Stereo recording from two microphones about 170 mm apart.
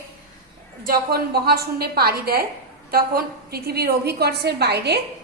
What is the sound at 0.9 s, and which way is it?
A woman's voice, 65° right (ahead or behind).